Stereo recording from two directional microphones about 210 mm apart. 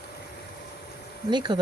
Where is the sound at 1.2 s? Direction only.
20° right (ahead or behind).